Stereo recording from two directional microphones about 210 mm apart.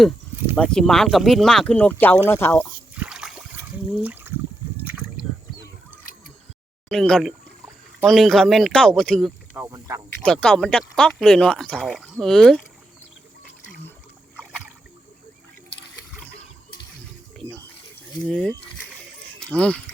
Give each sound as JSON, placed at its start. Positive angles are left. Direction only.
{"t": 0.5, "sound": "speech", "side_deg": 5}
{"t": 2.9, "sound": "a sound", "side_deg": -5}
{"t": 6.8, "sound": "speech", "side_deg": 5}
{"t": 9.6, "sound": "speech", "side_deg": -15}
{"t": 10.2, "sound": "speech", "side_deg": 5}
{"t": 18.3, "sound": "speech", "side_deg": 5}